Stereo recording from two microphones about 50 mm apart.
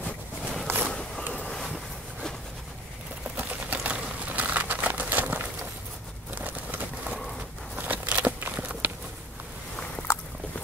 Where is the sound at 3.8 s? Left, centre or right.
Right.